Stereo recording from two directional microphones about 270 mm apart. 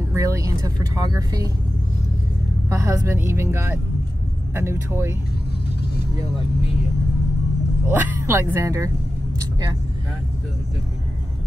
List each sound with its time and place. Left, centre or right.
0.1 s vehicle: centre
2.7 s a woman's voice: centre
7.9 s a woman's voice: centre